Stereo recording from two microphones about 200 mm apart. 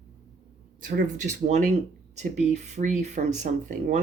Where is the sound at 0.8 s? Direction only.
40° right (ahead or behind).